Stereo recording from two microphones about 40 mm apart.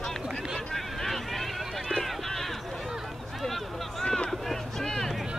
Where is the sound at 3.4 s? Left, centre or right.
Centre.